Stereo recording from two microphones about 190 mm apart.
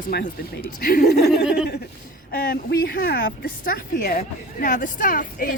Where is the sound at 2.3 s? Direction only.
55° left (ahead or behind).